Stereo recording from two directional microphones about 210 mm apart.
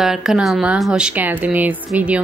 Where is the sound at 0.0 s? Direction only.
Centre (ahead or behind).